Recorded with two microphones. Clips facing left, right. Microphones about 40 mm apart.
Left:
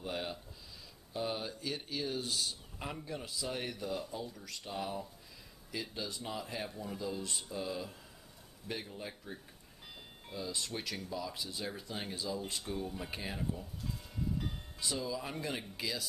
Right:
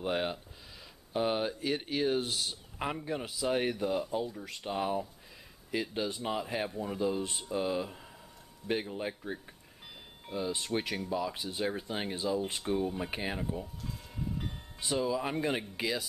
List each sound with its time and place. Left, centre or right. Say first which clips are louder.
0.0 s speech: right 7 dB; right
14.8 s speech: right 7 dB; right